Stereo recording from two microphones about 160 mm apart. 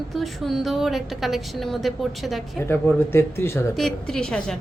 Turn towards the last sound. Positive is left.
turn(degrees=5)  # may be behind; listen again after turning